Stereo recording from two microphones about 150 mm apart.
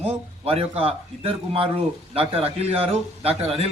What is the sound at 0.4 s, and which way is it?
Speech, 40° right (ahead or behind).